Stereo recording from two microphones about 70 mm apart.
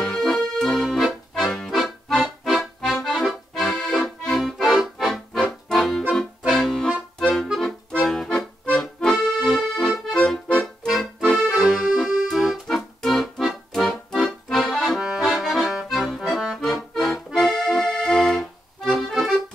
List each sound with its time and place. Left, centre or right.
0.0 s accordion: centre
10.9 s music: centre
11.5 s accordion: centre
15.0 s accordion: centre
15.2 s accordion: centre
16.5 s accordion: centre